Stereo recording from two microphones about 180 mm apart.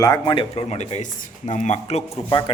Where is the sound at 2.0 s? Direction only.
20° left (ahead or behind).